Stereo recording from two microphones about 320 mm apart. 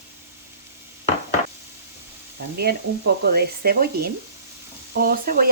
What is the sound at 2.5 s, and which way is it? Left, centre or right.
Frying, right.